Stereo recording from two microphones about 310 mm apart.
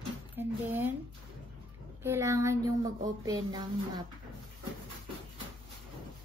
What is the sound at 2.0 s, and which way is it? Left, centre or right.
Speech, centre.